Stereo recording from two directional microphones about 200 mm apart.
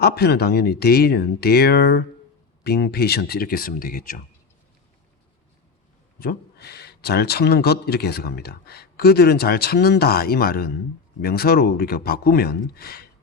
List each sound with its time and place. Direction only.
0.0 s a man's voice: 55° left (ahead or behind)
6.1 s a man's voice: 50° left (ahead or behind)